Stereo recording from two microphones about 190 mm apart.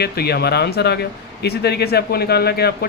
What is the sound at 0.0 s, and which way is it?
Speech, 55° left (ahead or behind).